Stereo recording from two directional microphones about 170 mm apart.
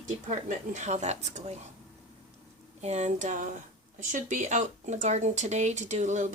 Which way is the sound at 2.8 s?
40° right (ahead or behind).